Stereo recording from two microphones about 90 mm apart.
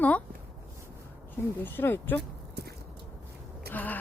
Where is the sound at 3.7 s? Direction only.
20° left (ahead or behind).